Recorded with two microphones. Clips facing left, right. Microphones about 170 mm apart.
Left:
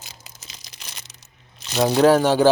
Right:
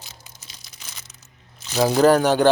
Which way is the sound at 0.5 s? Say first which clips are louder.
Left 2 dB; 90° left.